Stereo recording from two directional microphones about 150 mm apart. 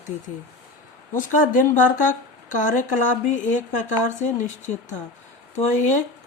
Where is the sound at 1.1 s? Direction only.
60° left (ahead or behind).